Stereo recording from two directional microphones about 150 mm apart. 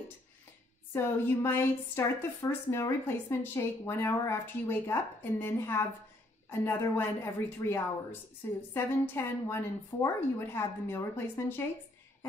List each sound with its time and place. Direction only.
0.9 s a woman's voice: 15° left (ahead or behind)